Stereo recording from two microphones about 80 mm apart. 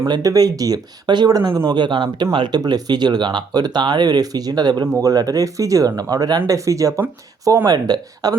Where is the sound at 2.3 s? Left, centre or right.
Right.